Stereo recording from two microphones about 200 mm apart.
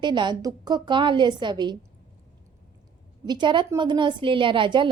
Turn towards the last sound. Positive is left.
turn(degrees=-25)  # may be behind; listen again after turning